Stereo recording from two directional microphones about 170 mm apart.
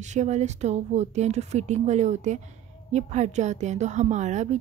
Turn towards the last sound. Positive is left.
turn(degrees=-45)  # may be behind; listen again after turning